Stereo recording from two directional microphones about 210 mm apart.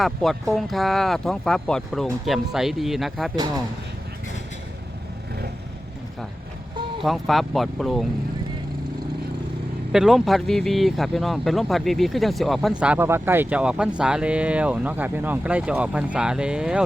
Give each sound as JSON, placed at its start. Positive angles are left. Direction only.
{"t": 0.0, "sound": "speech", "side_deg": 0}
{"t": 3.3, "sound": "speech", "side_deg": -20}
{"t": 7.0, "sound": "speech", "side_deg": 0}
{"t": 9.9, "sound": "speech", "side_deg": 0}